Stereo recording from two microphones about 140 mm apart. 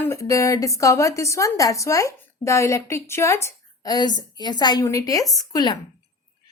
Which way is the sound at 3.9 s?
30° left (ahead or behind).